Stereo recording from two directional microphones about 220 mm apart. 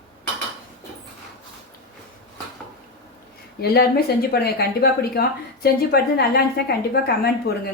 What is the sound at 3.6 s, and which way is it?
A woman's voice, 45° left (ahead or behind).